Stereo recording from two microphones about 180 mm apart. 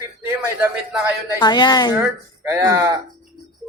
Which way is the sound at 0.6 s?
10° right (ahead or behind).